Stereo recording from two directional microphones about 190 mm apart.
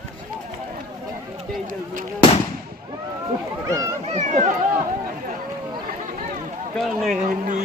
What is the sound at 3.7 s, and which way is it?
Speech, 20° right (ahead or behind).